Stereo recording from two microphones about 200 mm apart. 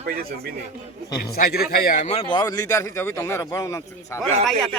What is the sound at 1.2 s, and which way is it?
A man's voice, 50° left (ahead or behind).